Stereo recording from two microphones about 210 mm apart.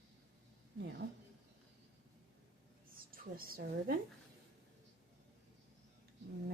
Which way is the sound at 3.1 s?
45° right (ahead or behind).